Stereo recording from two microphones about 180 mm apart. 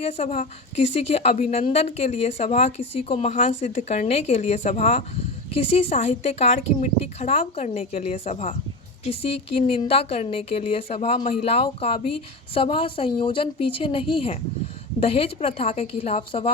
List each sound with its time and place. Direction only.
0.0 s a woman's voice: 35° left (ahead or behind)